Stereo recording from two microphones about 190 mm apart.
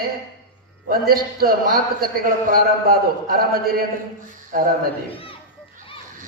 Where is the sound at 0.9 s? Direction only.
50° right (ahead or behind).